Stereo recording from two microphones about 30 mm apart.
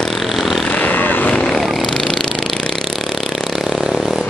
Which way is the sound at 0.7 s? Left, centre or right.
Left.